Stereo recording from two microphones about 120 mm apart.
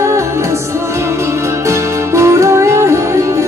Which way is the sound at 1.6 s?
25° right (ahead or behind).